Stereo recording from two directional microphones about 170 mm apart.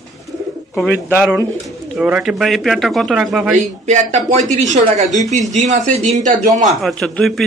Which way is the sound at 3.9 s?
40° right (ahead or behind).